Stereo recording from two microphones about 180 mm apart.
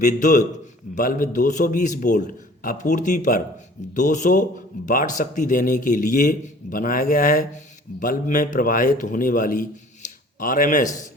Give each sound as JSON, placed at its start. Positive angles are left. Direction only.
{"t": 0.0, "sound": "a man's voice", "side_deg": 45}